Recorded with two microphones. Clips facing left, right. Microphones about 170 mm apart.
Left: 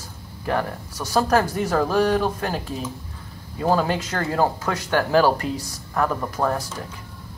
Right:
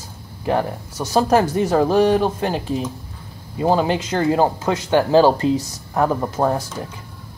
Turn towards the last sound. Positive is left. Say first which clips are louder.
# right 4 dB
turn(degrees=-25)  # may be behind; listen again after turning